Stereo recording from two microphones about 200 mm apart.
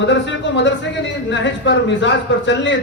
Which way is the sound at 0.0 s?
60° left (ahead or behind).